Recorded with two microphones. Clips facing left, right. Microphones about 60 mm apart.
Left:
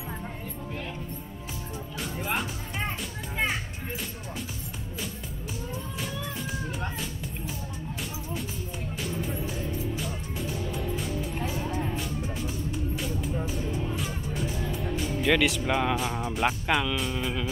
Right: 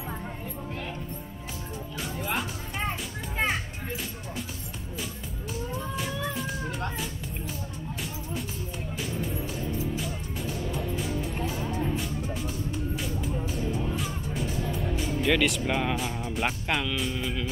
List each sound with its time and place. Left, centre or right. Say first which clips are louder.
2.0 s music: even; centre
5.7 s music: right 3 dB; centre
11.7 s music: right 1 dB; centre
15.0 s speech: left 1 dB; centre